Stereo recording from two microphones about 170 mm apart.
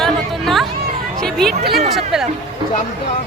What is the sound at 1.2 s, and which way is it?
Speech, centre (ahead or behind).